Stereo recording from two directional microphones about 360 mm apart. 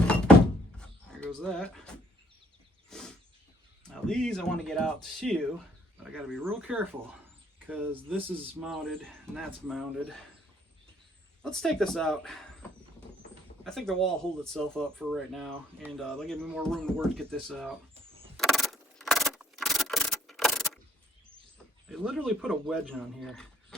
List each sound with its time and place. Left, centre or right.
0.8 s livestock: centre
2.9 s a sound: centre
3.8 s speech: centre
11.4 s speech: centre
13.7 s speech: centre
18.3 s rub: centre
21.8 s speech: centre